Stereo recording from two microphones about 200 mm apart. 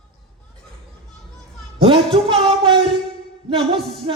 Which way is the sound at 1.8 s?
25° right (ahead or behind).